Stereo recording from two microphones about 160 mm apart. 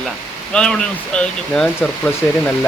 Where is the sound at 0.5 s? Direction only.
5° left (ahead or behind).